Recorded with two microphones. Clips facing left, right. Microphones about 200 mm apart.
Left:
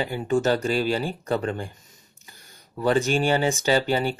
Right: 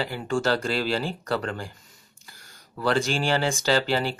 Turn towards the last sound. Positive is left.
turn(degrees=15)  # may be behind; listen again after turning